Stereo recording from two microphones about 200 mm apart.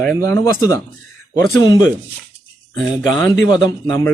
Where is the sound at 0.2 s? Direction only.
15° left (ahead or behind).